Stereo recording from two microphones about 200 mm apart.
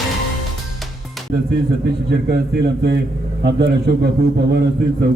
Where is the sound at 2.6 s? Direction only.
55° right (ahead or behind).